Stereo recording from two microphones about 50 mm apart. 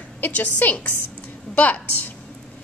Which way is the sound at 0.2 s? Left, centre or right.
Left.